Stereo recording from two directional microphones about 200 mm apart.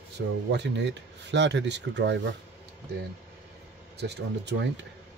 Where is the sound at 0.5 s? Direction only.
60° right (ahead or behind).